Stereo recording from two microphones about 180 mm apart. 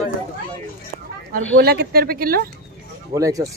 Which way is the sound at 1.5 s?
60° right (ahead or behind).